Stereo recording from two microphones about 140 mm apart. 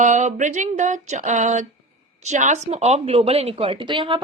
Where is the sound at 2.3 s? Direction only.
60° right (ahead or behind).